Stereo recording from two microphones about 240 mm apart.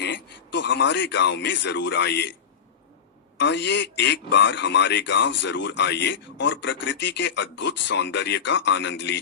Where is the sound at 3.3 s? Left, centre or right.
Left.